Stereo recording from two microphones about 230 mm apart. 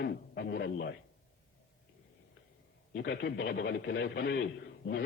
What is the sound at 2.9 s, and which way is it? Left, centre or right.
A man's voice, left.